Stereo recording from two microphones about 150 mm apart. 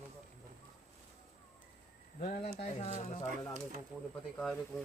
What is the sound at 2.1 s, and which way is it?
Speech, 50° left (ahead or behind).